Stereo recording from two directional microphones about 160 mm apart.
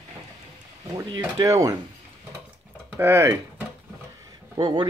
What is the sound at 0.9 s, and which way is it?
Speech, 20° right (ahead or behind).